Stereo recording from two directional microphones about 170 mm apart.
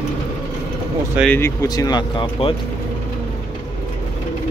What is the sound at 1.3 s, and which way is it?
Speech, 15° left (ahead or behind).